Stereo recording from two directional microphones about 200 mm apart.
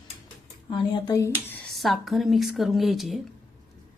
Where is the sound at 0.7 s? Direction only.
25° left (ahead or behind).